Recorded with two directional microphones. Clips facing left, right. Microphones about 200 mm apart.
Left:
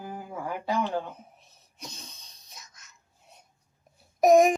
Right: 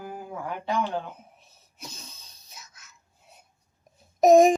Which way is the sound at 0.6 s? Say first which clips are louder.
Even; 5° left (ahead or behind).